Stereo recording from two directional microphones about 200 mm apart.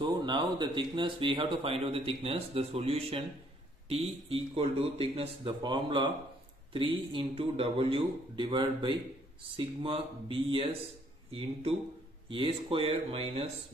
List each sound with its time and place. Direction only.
0.0 s speech: 25° right (ahead or behind)
12.3 s speech: 25° right (ahead or behind)